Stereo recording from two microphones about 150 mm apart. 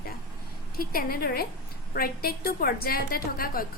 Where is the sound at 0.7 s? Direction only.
80° left.